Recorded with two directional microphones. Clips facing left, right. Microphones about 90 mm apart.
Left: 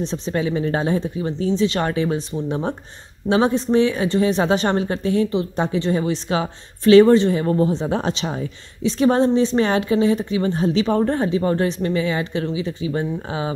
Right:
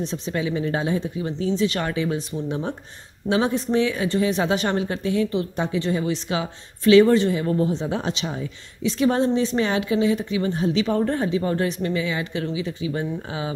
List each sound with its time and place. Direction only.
0.0 s a woman's voice: 35° left (ahead or behind)